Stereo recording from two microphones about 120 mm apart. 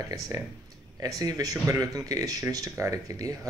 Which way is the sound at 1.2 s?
30° right (ahead or behind).